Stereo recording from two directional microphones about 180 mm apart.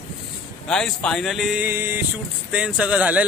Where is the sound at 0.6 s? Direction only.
5° left (ahead or behind).